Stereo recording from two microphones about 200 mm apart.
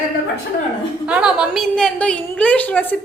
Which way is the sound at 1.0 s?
5° right (ahead or behind).